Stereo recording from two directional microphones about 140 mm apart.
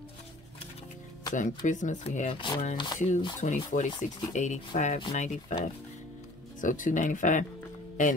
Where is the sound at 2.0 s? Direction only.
50° left (ahead or behind).